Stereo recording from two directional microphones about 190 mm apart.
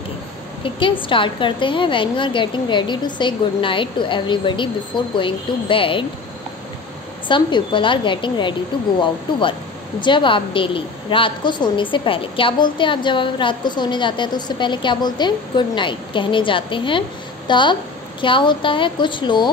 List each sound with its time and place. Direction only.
0.7 s speech: 25° left (ahead or behind)
7.2 s speech: 25° left (ahead or behind)